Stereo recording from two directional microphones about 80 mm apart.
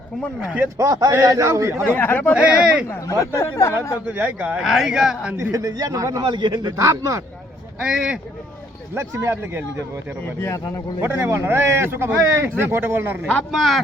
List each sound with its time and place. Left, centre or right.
0.8 s a man's voice: right
2.0 s speech: left
2.3 s speech: centre
2.8 s speech: left
4.0 s speech: centre
4.6 s speech: centre
5.4 s a man's voice: right
6.2 s a man's voice: right
6.8 s a man's voice: right
7.8 s speech: centre
9.0 s speech: right
11.0 s speech: right
13.5 s speech: centre